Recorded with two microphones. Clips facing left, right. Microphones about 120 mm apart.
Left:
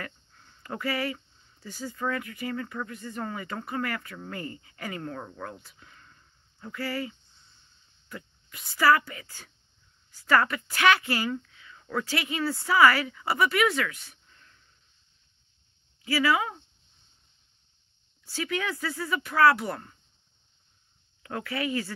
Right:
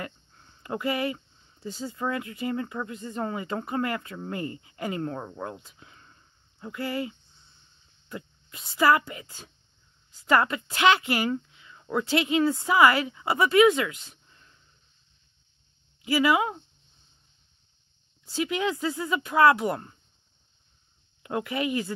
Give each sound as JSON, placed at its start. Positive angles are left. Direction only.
{"t": 0.0, "sound": "speech", "side_deg": -25}
{"t": 16.0, "sound": "speech", "side_deg": -20}
{"t": 18.2, "sound": "speech", "side_deg": -20}
{"t": 21.2, "sound": "speech", "side_deg": -20}